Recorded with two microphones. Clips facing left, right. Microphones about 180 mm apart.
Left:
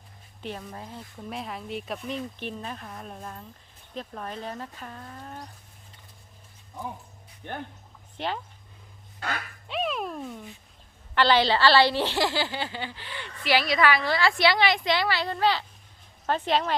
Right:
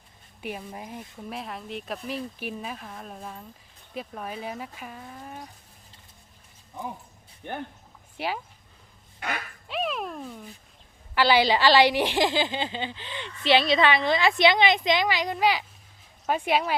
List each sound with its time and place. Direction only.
0.4 s speech: 10° right (ahead or behind)
1.3 s speech: centre (ahead or behind)
8.2 s speech: 10° right (ahead or behind)
9.6 s a sound: centre (ahead or behind)
11.1 s a woman's voice: 10° right (ahead or behind)